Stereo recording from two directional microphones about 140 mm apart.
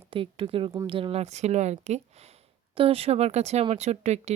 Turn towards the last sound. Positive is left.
turn(degrees=-55)  # may be behind; listen again after turning